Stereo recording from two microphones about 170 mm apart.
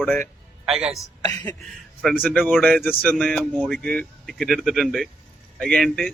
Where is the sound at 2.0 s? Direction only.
5° left (ahead or behind).